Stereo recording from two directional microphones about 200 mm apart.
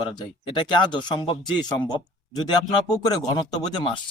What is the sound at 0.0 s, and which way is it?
Speech, 25° left (ahead or behind).